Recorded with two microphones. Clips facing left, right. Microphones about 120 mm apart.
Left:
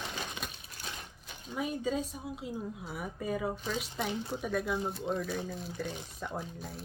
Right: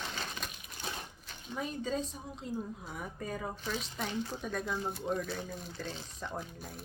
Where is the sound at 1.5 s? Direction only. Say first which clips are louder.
Left 3 dB; 10° left (ahead or behind).